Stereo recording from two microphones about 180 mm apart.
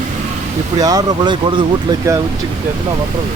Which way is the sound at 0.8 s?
20° right (ahead or behind).